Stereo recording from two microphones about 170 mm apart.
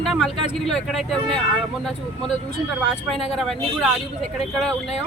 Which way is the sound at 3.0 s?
Centre (ahead or behind).